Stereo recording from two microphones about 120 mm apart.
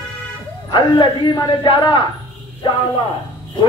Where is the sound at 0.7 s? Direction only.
35° left (ahead or behind).